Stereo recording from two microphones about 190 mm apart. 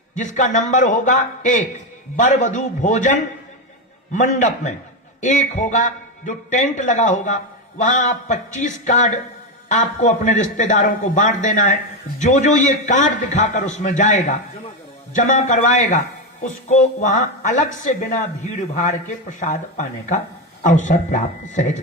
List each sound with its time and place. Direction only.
0.1 s a woman's voice: 40° left (ahead or behind)